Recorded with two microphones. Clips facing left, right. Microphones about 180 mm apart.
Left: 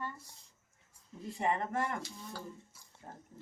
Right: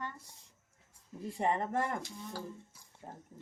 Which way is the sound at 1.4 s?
35° right (ahead or behind).